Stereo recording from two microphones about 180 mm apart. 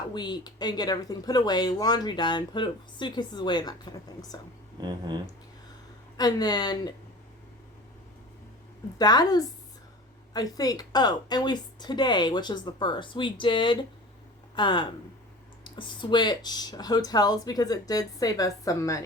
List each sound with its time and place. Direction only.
0.1 s speech: 25° left (ahead or behind)
4.8 s speech: 25° right (ahead or behind)
6.1 s speech: 20° left (ahead or behind)
9.0 s speech: 20° left (ahead or behind)